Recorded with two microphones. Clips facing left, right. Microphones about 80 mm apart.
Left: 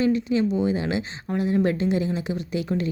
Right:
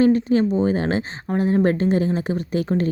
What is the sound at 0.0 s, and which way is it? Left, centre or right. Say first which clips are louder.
Speech: right 5 dB; right.